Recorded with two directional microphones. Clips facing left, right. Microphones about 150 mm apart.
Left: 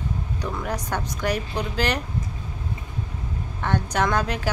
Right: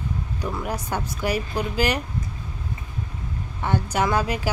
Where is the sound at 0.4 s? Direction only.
10° right (ahead or behind).